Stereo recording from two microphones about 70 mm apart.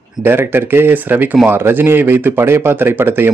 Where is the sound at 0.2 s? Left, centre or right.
Right.